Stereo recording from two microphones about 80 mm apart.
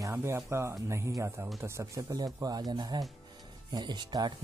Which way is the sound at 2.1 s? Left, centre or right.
Right.